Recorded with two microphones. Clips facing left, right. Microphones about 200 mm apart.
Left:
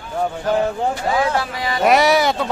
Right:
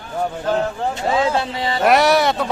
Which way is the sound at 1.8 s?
Centre (ahead or behind).